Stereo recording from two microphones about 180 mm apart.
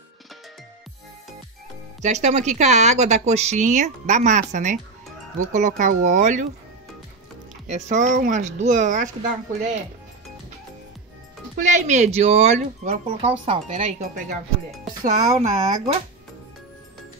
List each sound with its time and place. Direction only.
2.0 s speech: 40° right (ahead or behind)
7.6 s speech: 40° right (ahead or behind)
11.5 s speech: 40° right (ahead or behind)